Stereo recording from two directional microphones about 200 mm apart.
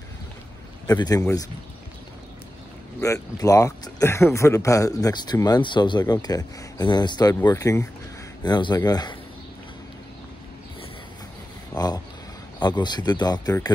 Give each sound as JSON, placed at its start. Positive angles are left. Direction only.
{"t": 0.8, "sound": "speech", "side_deg": 20}
{"t": 3.0, "sound": "speech", "side_deg": 15}
{"t": 11.7, "sound": "a sound", "side_deg": 20}
{"t": 12.5, "sound": "speech", "side_deg": 20}